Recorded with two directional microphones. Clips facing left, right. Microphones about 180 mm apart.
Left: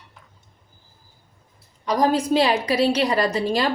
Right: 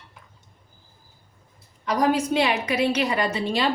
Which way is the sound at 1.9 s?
35° left (ahead or behind).